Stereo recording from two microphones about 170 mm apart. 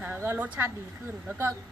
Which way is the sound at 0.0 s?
10° right (ahead or behind).